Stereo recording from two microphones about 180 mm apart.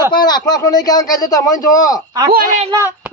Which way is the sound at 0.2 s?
25° left (ahead or behind).